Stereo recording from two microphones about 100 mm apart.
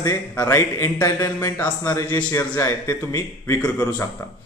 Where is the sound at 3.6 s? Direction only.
15° left (ahead or behind).